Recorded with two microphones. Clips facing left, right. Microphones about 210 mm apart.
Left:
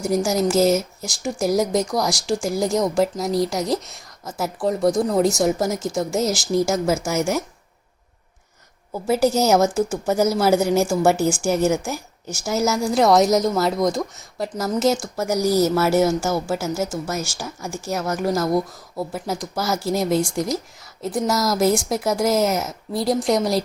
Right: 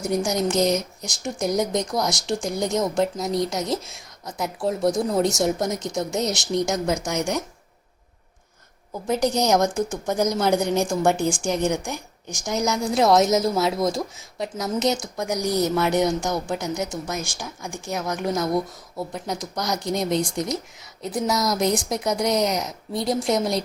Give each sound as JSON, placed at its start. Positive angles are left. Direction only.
{"t": 0.0, "sound": "speech", "side_deg": 0}
{"t": 9.0, "sound": "speech", "side_deg": 5}